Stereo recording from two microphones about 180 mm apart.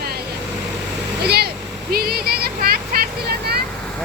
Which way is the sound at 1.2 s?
60° right (ahead or behind).